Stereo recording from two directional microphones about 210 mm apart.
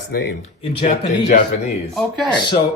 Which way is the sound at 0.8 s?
40° left (ahead or behind).